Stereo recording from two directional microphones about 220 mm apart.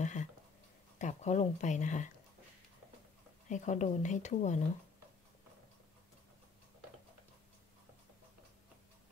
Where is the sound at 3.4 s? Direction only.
35° left (ahead or behind).